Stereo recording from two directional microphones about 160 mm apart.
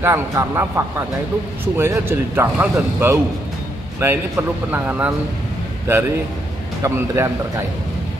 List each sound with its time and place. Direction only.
0.0 s speech: 15° right (ahead or behind)